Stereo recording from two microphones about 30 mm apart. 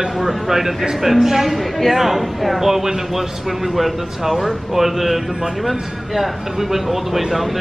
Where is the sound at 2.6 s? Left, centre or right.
Centre.